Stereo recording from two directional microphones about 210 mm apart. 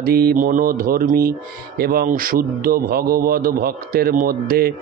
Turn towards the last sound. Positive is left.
turn(degrees=-45)  # may be behind; listen again after turning